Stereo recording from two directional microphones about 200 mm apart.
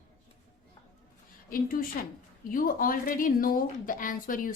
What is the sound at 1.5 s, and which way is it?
A woman's voice, 45° left (ahead or behind).